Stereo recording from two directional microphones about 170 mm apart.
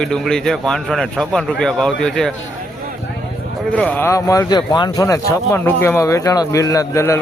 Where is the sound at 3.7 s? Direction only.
10° left (ahead or behind).